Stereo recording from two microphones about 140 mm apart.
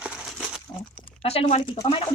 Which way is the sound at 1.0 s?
45° left (ahead or behind).